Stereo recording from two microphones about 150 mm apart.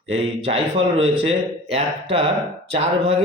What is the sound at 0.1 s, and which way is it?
A man's voice, 40° right (ahead or behind).